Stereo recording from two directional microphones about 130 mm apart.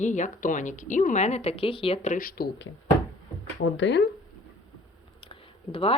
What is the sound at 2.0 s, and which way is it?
Speech, 70° left (ahead or behind).